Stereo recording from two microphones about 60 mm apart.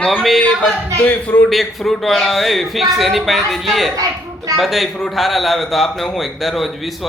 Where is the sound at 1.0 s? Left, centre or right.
Left.